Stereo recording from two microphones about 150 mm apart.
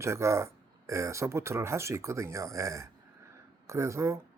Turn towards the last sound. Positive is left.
turn(degrees=-20)  # may be behind; listen again after turning